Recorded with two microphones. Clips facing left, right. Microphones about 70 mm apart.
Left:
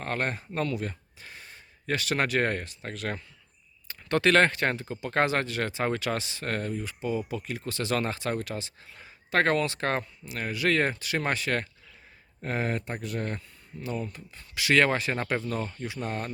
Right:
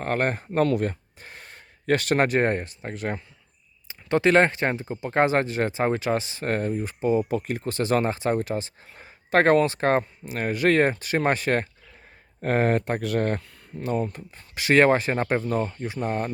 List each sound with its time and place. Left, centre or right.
0.0 s speech: right
12.4 s speech: right
13.2 s speech: right
15.6 s speech: right